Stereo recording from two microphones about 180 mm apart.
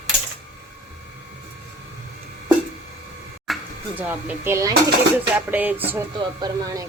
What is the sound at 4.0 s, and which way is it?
Speech, 10° right (ahead or behind).